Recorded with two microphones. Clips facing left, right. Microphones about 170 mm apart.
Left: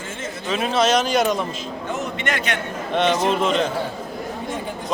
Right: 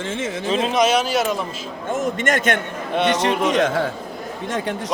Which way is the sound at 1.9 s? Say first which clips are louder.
Right 6 dB; 45° right (ahead or behind).